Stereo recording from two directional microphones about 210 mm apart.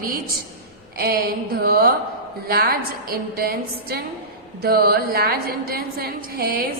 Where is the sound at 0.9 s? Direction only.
45° right (ahead or behind).